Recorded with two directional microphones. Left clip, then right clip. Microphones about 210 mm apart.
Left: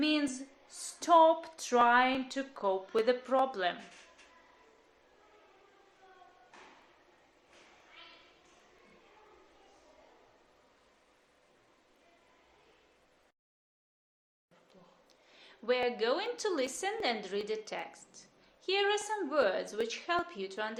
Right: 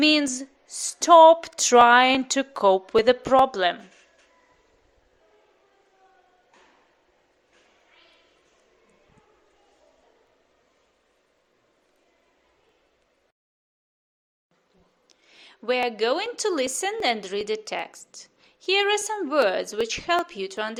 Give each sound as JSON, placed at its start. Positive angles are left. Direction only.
{"t": 0.0, "sound": "speech", "side_deg": -45}
{"t": 15.1, "sound": "a woman's voice", "side_deg": -40}